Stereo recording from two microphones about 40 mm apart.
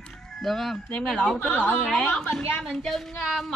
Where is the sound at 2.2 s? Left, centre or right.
Left; by 3.5 s centre.